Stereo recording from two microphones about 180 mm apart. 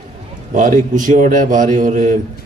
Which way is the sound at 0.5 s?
45° right (ahead or behind).